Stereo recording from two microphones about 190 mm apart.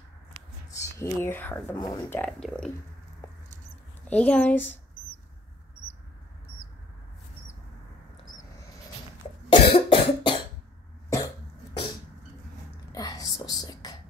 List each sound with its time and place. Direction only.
0.3 s a sound: 30° right (ahead or behind)
0.7 s speech: 15° left (ahead or behind)
2.1 s speech: 5° left (ahead or behind)
3.2 s patter: 15° left (ahead or behind)
4.0 s speech: 5° left (ahead or behind)
9.5 s cough: 30° left (ahead or behind)
12.9 s whispering: 20° left (ahead or behind)